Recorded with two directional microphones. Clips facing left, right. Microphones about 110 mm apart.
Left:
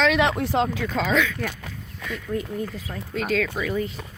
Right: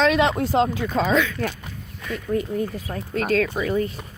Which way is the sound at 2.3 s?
75° right (ahead or behind).